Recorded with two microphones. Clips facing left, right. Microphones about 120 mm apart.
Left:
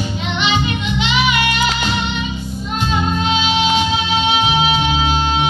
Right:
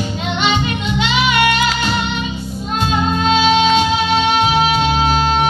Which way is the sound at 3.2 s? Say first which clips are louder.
Right 7 dB; 50° right (ahead or behind).